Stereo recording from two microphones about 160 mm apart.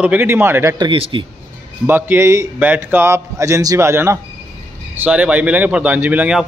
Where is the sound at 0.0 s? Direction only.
10° right (ahead or behind).